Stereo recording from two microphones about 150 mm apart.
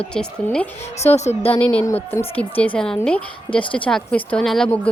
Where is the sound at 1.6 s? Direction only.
10° left (ahead or behind).